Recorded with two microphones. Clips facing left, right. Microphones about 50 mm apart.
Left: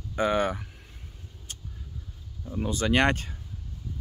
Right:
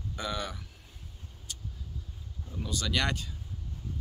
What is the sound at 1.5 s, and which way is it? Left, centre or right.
Vehicle, left.